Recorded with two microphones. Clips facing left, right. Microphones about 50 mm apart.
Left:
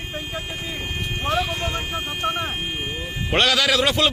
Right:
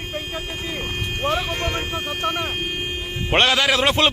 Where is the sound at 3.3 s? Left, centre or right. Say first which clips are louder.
Right 1 dB; right.